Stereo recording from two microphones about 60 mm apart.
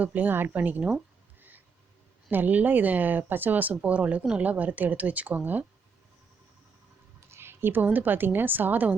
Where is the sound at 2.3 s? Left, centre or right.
Right.